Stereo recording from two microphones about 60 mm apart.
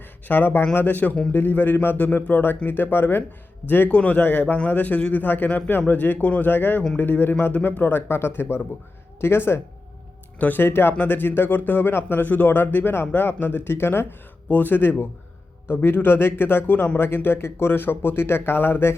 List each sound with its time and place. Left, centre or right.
0.3 s speech: left
1.1 s speech: centre
1.4 s speech: left
3.8 s speech: left
10.3 s speech: left